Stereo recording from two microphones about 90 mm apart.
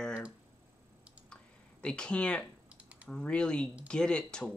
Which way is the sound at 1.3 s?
10° left (ahead or behind).